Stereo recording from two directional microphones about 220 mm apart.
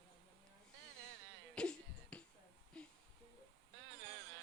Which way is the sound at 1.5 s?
5° left (ahead or behind).